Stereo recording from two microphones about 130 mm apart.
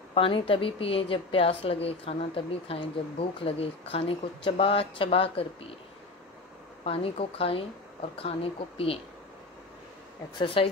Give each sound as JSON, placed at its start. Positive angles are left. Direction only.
{"t": 0.1, "sound": "a woman's voice", "side_deg": 45}
{"t": 6.8, "sound": "a woman's voice", "side_deg": 45}
{"t": 10.4, "sound": "a woman's voice", "side_deg": 45}